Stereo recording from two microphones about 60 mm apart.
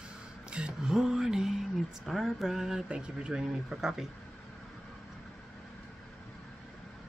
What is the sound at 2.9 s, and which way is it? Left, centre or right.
Speech, centre.